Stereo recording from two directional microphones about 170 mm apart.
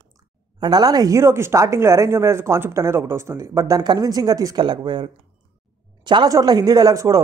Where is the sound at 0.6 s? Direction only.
25° right (ahead or behind).